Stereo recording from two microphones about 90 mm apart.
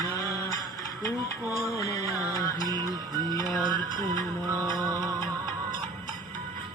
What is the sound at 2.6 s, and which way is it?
Music, 50° right (ahead or behind).